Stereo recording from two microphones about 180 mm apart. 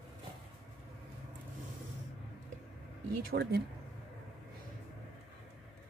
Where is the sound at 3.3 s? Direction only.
60° right (ahead or behind).